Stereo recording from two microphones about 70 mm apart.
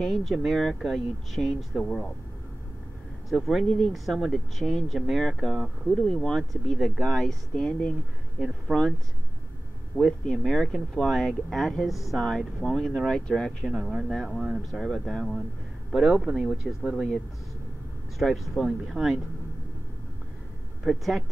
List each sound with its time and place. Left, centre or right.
0.0 s speech: centre
3.3 s speech: centre
8.7 s speech: right
10.2 s speech: centre
15.9 s speech: centre
18.2 s speech: centre
20.8 s speech: centre